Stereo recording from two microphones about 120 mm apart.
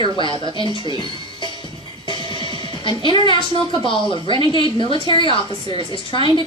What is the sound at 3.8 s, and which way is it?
A woman's voice, 45° left (ahead or behind).